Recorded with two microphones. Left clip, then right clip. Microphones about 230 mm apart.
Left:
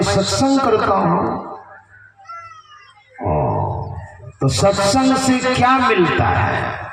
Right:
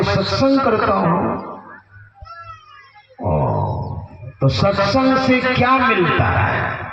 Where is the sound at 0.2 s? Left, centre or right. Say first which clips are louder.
Even; left.